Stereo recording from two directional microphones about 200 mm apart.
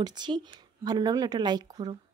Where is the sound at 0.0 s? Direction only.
20° right (ahead or behind).